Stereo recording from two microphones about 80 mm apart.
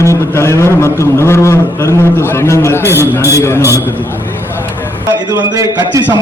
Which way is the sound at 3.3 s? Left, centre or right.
Left.